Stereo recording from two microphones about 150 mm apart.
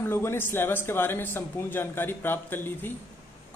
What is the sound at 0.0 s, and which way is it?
A woman's voice, 15° left (ahead or behind).